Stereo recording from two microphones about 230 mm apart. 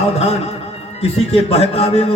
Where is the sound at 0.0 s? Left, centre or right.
Left.